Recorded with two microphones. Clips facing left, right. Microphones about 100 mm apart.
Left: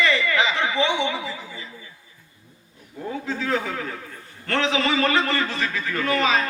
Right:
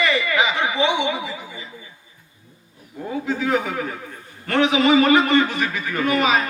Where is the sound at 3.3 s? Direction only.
15° right (ahead or behind).